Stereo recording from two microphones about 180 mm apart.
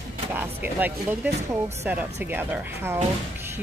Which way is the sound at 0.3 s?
10° right (ahead or behind).